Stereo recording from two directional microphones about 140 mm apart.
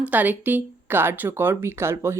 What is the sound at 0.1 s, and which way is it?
Speech, 10° right (ahead or behind).